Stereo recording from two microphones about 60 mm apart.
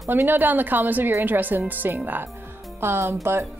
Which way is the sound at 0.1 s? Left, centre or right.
Right.